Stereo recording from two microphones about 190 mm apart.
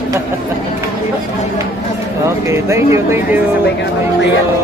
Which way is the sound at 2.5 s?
15° right (ahead or behind).